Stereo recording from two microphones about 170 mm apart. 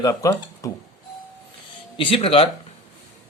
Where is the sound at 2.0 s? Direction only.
35° left (ahead or behind).